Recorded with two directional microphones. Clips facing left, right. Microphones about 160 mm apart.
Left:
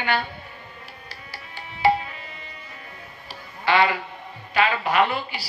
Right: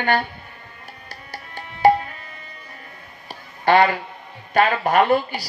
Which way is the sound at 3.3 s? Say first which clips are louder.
Right 5 dB; 50° right (ahead or behind).